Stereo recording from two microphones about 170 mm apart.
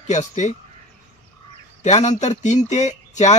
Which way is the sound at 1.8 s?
45° left (ahead or behind).